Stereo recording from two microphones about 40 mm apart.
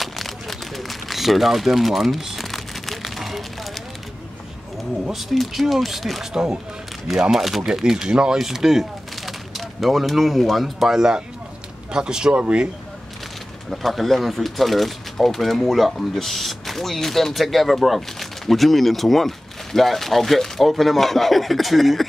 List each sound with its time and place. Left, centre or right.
0.0 s a sound: centre
5.1 s speech: centre
6.3 s speech: centre
10.9 s speech: centre
12.4 s speech: right
13.7 s speech: centre